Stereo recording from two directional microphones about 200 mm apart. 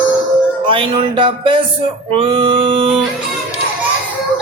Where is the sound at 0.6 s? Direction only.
25° right (ahead or behind).